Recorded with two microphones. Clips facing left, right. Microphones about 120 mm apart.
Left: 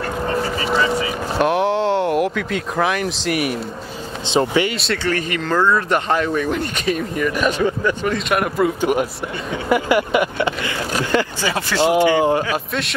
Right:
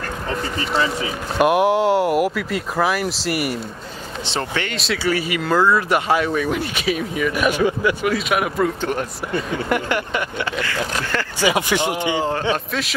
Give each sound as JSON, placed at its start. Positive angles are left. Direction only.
{"t": 1.4, "sound": "speech", "side_deg": -10}
{"t": 4.3, "sound": "speech", "side_deg": 15}
{"t": 4.7, "sound": "speech", "side_deg": -5}
{"t": 11.4, "sound": "speech", "side_deg": -15}
{"t": 12.2, "sound": "speech", "side_deg": 15}